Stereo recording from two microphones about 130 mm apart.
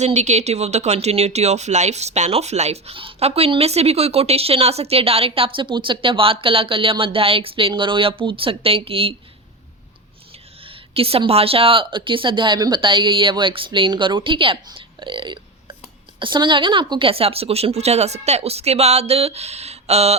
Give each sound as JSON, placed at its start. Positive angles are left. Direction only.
{"t": 0.0, "sound": "speech", "side_deg": -60}
{"t": 10.7, "sound": "speech", "side_deg": -45}